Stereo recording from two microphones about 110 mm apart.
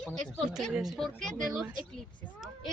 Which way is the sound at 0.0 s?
5° left (ahead or behind).